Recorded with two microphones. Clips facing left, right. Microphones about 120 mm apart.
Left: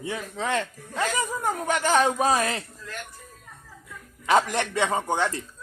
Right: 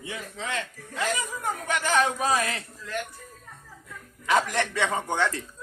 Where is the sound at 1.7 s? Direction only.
35° left (ahead or behind).